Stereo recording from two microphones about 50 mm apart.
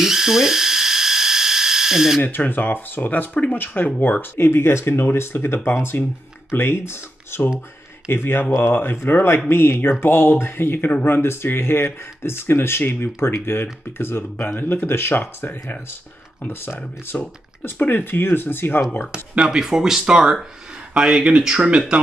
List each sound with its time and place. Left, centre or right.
0.0 s electric toothbrush: centre
2.2 s speech: left
3.5 s speech: left
14.3 s speech: left
17.2 s speech: left
19.1 s speech: centre